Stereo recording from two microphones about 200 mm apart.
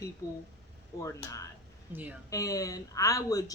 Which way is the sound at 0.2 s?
15° left (ahead or behind).